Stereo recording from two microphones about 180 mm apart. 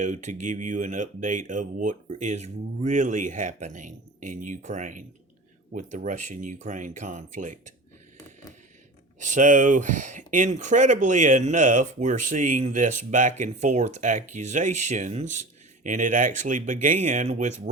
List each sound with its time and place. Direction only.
0.0 s speech: 45° right (ahead or behind)
9.1 s speech: 45° right (ahead or behind)